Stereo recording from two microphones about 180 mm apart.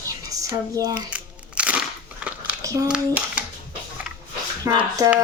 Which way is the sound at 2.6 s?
20° right (ahead or behind).